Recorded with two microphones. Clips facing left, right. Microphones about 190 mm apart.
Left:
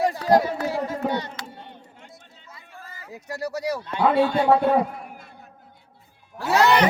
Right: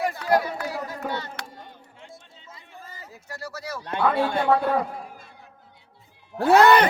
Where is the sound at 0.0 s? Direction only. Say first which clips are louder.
Left 4 dB; 35° left (ahead or behind).